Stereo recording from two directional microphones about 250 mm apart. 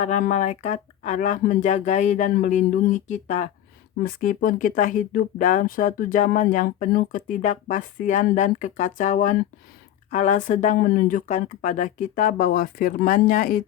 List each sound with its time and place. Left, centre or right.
0.0 s speech: left